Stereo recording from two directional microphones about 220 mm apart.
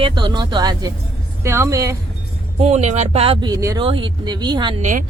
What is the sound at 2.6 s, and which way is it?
Speech, 30° right (ahead or behind).